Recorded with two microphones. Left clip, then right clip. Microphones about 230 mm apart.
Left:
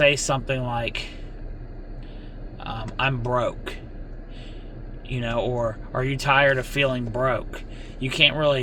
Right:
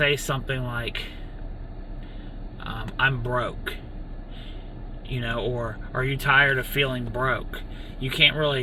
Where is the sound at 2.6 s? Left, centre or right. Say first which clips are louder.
Right 1 dB; centre.